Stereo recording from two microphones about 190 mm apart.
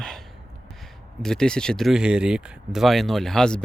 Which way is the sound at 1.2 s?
5° left (ahead or behind).